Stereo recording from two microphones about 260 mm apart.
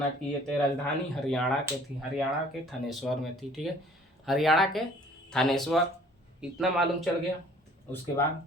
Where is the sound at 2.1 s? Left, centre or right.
Centre.